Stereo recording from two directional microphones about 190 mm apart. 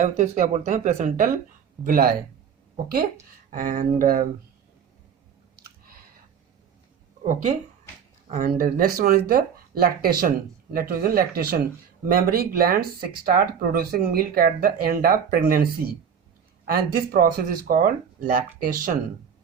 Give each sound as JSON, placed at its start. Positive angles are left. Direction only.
{"t": 0.0, "sound": "speech", "side_deg": -40}
{"t": 8.3, "sound": "speech", "side_deg": -40}